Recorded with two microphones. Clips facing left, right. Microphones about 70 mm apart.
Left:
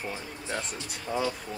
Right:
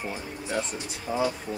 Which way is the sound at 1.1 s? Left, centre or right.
Centre.